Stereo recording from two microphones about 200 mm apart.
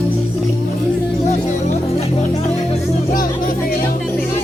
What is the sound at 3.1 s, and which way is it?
Music, 45° left (ahead or behind).